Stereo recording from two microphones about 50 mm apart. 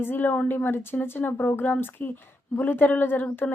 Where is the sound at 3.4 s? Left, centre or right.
Left.